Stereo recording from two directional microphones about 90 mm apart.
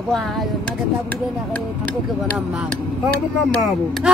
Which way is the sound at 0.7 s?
15° left (ahead or behind).